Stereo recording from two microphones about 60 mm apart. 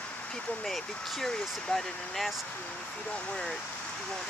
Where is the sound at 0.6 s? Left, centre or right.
Centre.